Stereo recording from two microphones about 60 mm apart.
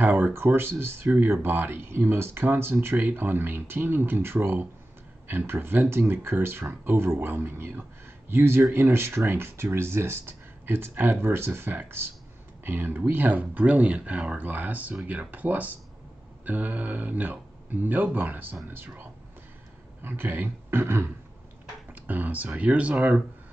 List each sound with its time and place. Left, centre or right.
0.0 s a sound: right
0.3 s speech: right
20.0 s speech: right
21.9 s speech: right